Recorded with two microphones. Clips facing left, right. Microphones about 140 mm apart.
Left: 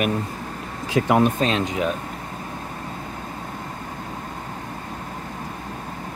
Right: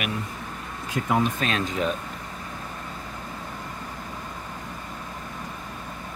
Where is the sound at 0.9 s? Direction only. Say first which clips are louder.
Left 6 dB; 85° left.